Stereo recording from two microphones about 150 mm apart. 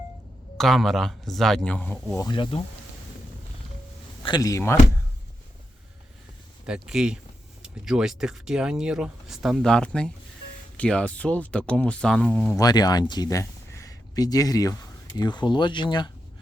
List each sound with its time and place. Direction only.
0.5 s speech: centre (ahead or behind)
2.1 s speech: 30° left (ahead or behind)
4.2 s speech: 25° left (ahead or behind)
6.7 s speech: 5° right (ahead or behind)
12.5 s speech: 25° left (ahead or behind)